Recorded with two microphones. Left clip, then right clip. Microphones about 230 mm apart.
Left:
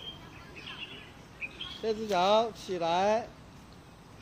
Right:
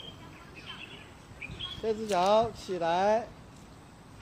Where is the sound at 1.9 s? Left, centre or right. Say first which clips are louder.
Even; centre.